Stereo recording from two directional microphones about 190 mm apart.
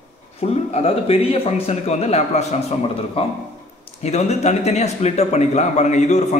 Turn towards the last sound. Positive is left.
turn(degrees=35)  # may be behind; listen again after turning